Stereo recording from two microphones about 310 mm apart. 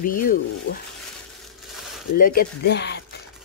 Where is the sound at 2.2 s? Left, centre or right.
Left.